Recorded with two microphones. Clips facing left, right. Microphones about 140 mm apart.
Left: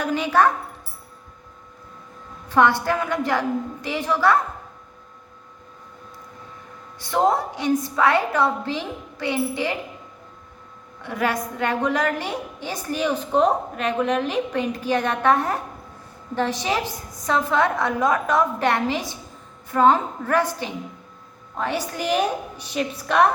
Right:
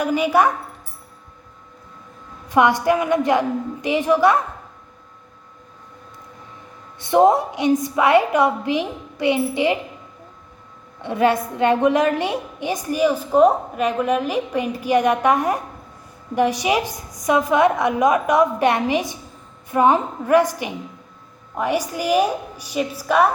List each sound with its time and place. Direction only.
0.0 s a woman's voice: 10° right (ahead or behind)
2.5 s a woman's voice: 15° right (ahead or behind)
7.0 s a woman's voice: 20° right (ahead or behind)
11.0 s a woman's voice: 20° right (ahead or behind)